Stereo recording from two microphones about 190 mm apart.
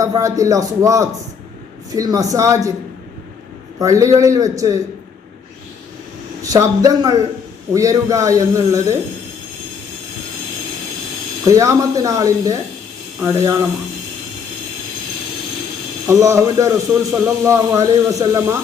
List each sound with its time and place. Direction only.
0.0 s a man's voice: 15° right (ahead or behind)
3.8 s a man's voice: 20° right (ahead or behind)
6.4 s a man's voice: 20° right (ahead or behind)
11.4 s a man's voice: 20° right (ahead or behind)
16.0 s a man's voice: 15° right (ahead or behind)